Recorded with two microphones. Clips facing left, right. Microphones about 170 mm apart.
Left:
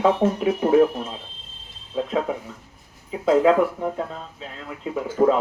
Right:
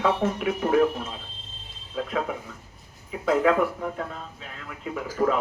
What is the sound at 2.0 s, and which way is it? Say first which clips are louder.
Speech: left 4 dB; 25° left (ahead or behind).